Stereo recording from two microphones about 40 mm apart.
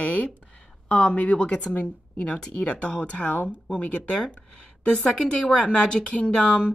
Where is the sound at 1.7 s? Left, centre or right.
Left.